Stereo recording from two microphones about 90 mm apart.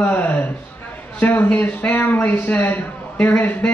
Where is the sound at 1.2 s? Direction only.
20° left (ahead or behind).